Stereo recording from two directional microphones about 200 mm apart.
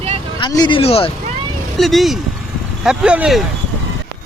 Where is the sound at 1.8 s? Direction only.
Centre (ahead or behind).